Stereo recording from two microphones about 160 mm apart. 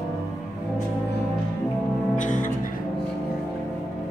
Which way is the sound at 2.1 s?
55° left (ahead or behind).